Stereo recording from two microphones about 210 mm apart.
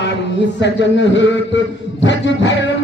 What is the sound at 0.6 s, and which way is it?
A man's voice, 55° left (ahead or behind).